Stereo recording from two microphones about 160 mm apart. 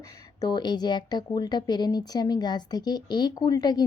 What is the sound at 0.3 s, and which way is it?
Speech, 25° left (ahead or behind).